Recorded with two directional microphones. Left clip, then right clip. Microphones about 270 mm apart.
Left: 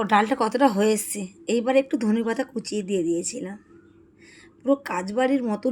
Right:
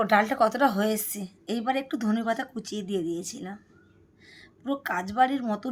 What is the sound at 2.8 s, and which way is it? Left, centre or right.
Speech, right.